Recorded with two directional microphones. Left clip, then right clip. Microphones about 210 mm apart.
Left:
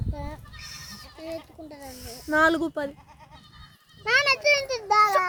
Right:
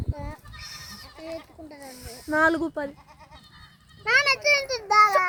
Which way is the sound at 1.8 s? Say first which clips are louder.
Left 1 dB; 10° right (ahead or behind).